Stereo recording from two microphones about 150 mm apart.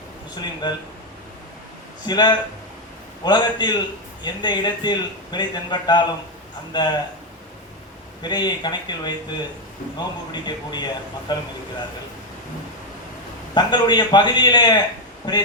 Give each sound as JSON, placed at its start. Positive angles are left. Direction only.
{"t": 0.3, "sound": "speech", "side_deg": 30}
{"t": 2.0, "sound": "speech", "side_deg": 30}
{"t": 8.2, "sound": "speech", "side_deg": 30}
{"t": 13.5, "sound": "speech", "side_deg": 30}